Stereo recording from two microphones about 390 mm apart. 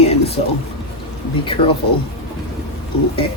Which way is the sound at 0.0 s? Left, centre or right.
Centre.